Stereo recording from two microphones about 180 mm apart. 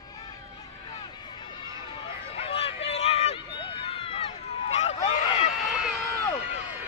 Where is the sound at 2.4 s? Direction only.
35° left (ahead or behind).